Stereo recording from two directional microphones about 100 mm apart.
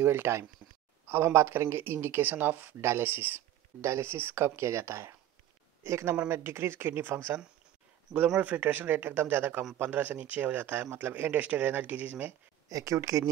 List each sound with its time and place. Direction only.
0.0 s speech: 25° right (ahead or behind)
8.4 s speech: 15° right (ahead or behind)
12.6 s speech: 35° right (ahead or behind)